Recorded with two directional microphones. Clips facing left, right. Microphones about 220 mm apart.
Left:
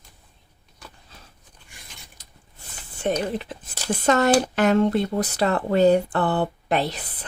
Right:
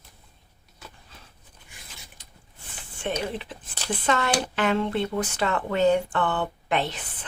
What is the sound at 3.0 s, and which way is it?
Speech, 40° left (ahead or behind).